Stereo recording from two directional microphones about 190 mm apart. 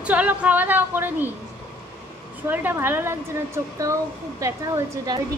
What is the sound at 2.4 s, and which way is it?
Speech, 10° right (ahead or behind).